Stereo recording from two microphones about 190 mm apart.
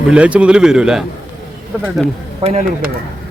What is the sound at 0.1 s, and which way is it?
Speech, 5° right (ahead or behind).